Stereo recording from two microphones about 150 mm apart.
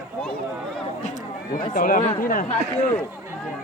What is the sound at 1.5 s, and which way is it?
Speech, 65° left (ahead or behind).